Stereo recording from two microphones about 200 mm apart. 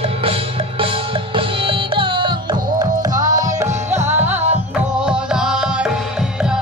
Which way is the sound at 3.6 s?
35° right (ahead or behind).